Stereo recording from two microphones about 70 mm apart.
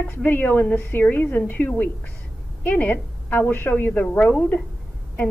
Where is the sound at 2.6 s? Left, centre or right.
Left.